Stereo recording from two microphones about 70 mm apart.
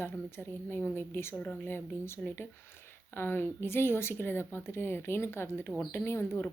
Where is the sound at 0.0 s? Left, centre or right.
Left.